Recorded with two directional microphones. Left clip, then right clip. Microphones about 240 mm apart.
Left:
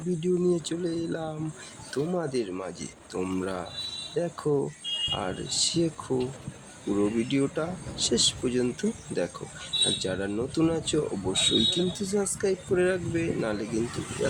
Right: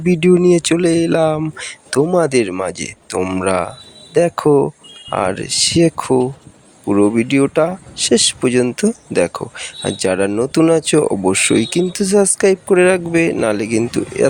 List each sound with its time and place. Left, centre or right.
0.1 s speech: right